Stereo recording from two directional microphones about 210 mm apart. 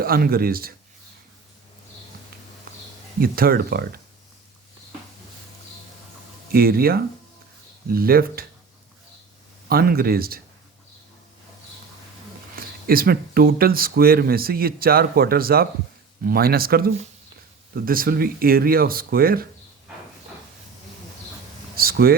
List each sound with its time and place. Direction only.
0.0 s speech: 45° right (ahead or behind)
3.2 s speech: 45° right (ahead or behind)
6.5 s speech: 45° right (ahead or behind)
9.6 s speech: 45° right (ahead or behind)
12.5 s speech: 45° right (ahead or behind)
21.8 s a sound: 45° right (ahead or behind)